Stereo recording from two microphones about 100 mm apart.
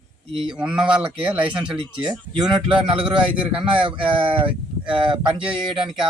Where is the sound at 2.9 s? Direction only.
60° right (ahead or behind).